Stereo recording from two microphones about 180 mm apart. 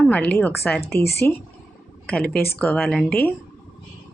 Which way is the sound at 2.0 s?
5° left (ahead or behind).